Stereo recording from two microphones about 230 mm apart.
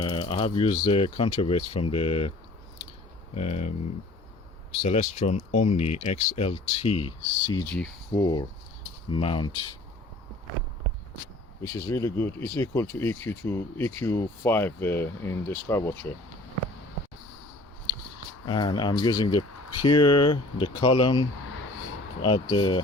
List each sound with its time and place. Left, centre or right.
0.0 s speech: left
3.3 s speech: left
4.8 s speech: left
11.7 s speech: centre
18.4 s speech: centre